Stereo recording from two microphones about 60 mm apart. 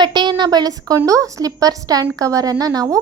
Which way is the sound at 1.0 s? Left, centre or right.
Right.